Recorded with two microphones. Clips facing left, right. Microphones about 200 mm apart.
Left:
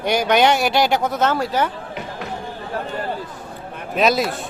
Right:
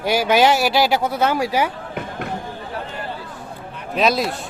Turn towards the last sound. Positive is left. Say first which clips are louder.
# left 1 dB
turn(degrees=0)  # may be behind; listen again after turning